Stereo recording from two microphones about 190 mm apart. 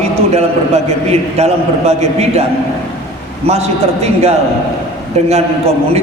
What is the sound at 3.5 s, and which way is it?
A man's voice, 35° right (ahead or behind).